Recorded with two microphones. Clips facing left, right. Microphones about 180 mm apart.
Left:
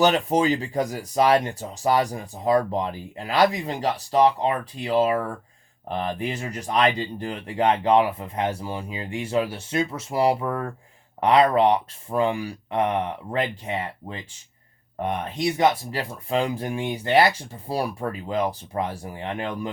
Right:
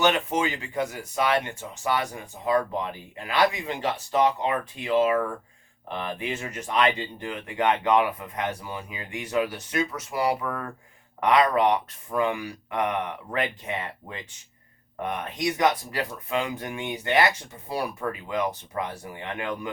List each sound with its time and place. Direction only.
0.0 s speech: 35° left (ahead or behind)
15.0 s speech: 30° left (ahead or behind)